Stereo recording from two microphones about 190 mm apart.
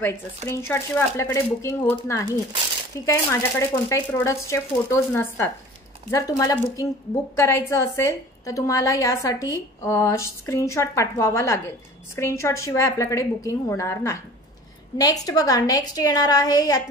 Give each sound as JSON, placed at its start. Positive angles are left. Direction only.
{"t": 0.5, "sound": "a woman's voice", "side_deg": 15}